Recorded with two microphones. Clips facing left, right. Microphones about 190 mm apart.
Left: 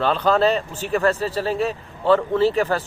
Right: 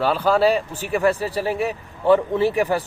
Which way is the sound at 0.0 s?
10° right (ahead or behind).